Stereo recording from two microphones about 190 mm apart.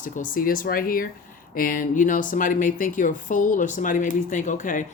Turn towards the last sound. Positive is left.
turn(degrees=40)  # may be behind; listen again after turning